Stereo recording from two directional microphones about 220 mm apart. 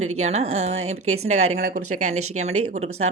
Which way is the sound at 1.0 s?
70° right (ahead or behind).